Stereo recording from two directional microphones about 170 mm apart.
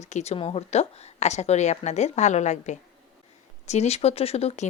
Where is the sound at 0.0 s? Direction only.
40° left (ahead or behind).